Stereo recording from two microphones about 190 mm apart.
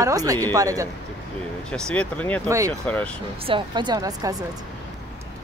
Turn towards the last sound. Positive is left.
turn(degrees=-20)  # may be behind; listen again after turning